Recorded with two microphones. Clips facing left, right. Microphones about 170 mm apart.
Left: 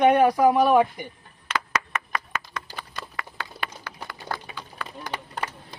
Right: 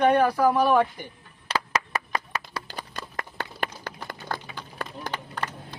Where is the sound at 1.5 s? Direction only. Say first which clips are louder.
Right 1 dB; 35° right (ahead or behind).